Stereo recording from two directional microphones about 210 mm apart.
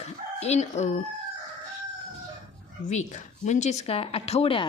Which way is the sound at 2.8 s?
35° left (ahead or behind).